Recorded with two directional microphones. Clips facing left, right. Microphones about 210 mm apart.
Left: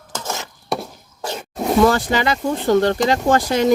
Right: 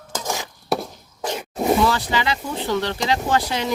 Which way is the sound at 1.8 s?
50° left (ahead or behind).